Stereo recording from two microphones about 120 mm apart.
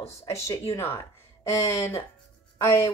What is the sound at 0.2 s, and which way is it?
Speech, 25° left (ahead or behind).